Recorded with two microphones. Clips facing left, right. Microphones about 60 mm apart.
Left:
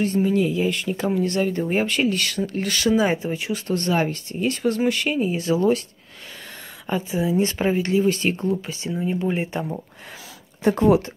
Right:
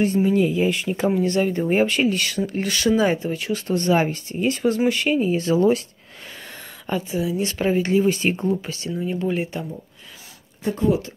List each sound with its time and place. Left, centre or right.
0.0 s speech: centre
3.5 s speech: centre
7.1 s speech: left
7.5 s speech: centre
7.8 s speech: centre
8.8 s speech: centre
10.6 s speech: left